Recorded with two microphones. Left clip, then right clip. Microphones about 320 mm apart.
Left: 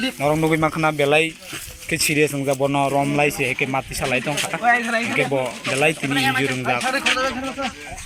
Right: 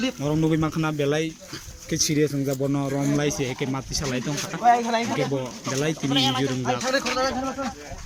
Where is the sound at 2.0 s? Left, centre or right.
Left.